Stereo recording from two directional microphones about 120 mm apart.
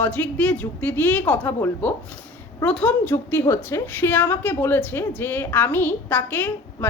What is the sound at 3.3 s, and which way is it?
A woman's voice, 20° left (ahead or behind).